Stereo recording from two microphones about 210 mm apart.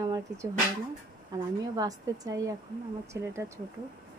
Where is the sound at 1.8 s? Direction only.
15° right (ahead or behind).